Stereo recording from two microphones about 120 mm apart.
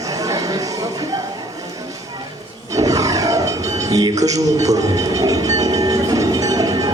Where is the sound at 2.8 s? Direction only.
30° right (ahead or behind).